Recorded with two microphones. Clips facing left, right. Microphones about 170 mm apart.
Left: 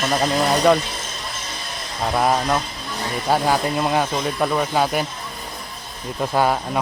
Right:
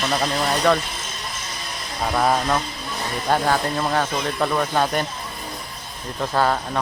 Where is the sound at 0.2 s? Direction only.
15° left (ahead or behind).